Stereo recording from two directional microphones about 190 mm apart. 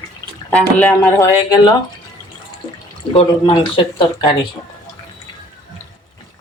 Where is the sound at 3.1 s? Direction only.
25° left (ahead or behind).